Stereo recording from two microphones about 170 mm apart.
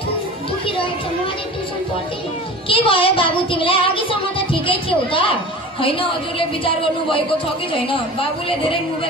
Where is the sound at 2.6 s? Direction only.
30° left (ahead or behind).